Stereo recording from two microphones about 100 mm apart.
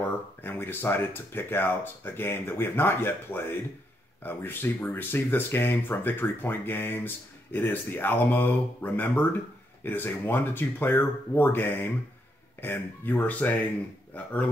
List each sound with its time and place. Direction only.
0.4 s speech: 20° left (ahead or behind)